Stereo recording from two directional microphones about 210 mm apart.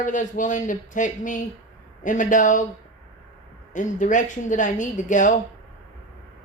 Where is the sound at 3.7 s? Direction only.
35° left (ahead or behind).